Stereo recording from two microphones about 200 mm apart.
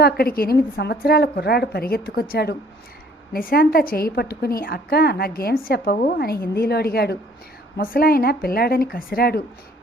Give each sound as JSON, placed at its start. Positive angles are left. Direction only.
{"t": 0.0, "sound": "a woman's voice", "side_deg": 50}